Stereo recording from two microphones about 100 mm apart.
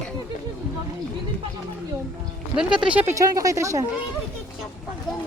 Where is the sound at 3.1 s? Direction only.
35° right (ahead or behind).